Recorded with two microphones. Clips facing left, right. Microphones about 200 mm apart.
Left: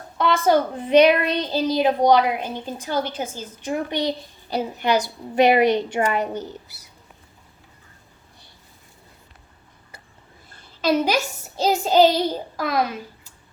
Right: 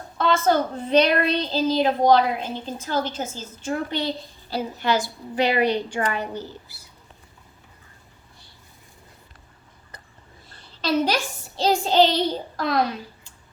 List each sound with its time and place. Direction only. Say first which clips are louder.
0.2 s a woman's voice: left 2 dB; 15° left (ahead or behind)
11.7 s child singing: left 1 dB; 5° left (ahead or behind)
12.1 s a woman's voice: left 1 dB; 5° left (ahead or behind)